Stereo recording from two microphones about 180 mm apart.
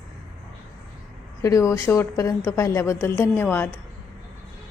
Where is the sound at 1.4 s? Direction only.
15° left (ahead or behind).